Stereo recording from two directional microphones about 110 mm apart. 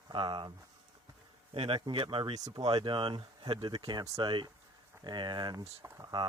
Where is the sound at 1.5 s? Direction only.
55° right (ahead or behind).